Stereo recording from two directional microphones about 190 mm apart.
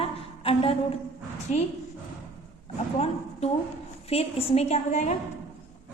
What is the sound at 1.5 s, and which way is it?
Speech, 40° left (ahead or behind).